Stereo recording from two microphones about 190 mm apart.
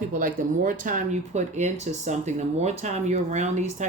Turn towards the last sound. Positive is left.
turn(degrees=-40)  # may be behind; listen again after turning